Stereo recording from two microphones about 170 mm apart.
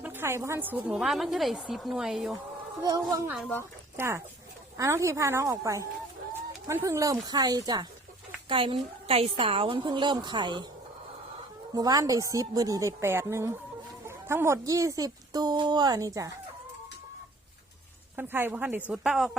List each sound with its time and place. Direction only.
0.0 s a woman's voice: 15° right (ahead or behind)
2.8 s a woman's voice: 20° right (ahead or behind)
11.7 s a woman's voice: 20° right (ahead or behind)
18.2 s speech: 10° right (ahead or behind)